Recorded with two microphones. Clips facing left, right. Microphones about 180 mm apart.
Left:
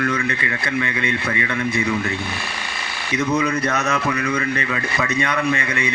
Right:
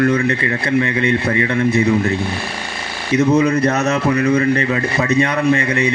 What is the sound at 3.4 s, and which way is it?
A man's voice, 35° right (ahead or behind).